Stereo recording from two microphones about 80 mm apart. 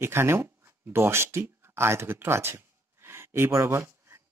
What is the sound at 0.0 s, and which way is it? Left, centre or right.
Speech, right.